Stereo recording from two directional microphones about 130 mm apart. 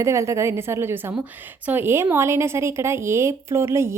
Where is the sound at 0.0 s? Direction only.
20° right (ahead or behind).